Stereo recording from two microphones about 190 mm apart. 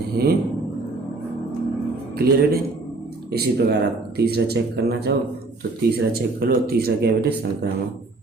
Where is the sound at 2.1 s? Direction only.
55° right (ahead or behind).